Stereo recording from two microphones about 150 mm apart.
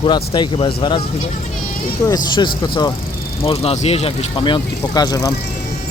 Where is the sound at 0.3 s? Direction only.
35° left (ahead or behind).